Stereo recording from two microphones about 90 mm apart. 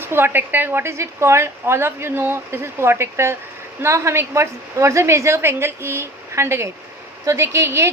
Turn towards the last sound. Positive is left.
turn(degrees=-30)  # may be behind; listen again after turning